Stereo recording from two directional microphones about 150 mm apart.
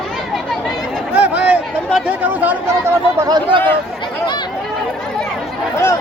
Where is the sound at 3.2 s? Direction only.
30° right (ahead or behind).